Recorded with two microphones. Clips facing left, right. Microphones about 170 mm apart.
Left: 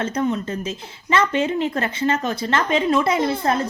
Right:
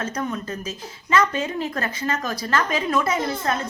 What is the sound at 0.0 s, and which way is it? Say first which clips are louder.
A woman's voice: left 5 dB; 25° left (ahead or behind).